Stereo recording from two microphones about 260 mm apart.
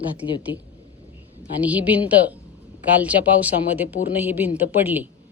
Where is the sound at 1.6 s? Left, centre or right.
Centre.